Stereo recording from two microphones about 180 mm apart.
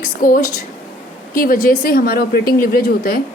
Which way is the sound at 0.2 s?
45° left (ahead or behind).